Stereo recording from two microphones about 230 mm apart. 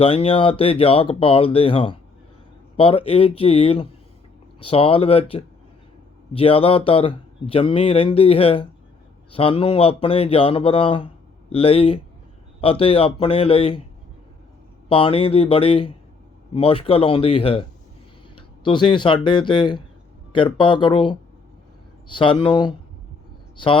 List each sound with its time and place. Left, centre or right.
0.0 s speech: left
14.8 s speech: left